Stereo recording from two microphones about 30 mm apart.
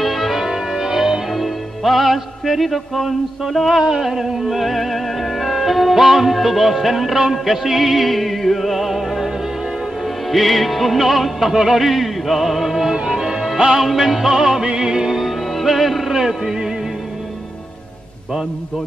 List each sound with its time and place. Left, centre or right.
0.0 s music: centre
0.5 s music: centre
1.3 s music: centre
3.6 s a sound: centre
4.0 s music: centre
10.3 s music: centre
12.9 s music: right
14.7 s music: right
15.0 s music: centre